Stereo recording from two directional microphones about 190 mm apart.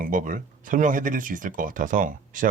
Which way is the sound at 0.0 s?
45° right (ahead or behind).